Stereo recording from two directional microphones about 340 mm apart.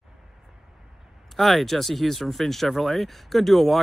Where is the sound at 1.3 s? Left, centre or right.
Centre.